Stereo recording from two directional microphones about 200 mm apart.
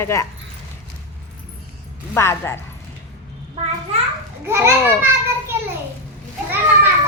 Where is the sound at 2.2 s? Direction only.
15° left (ahead or behind).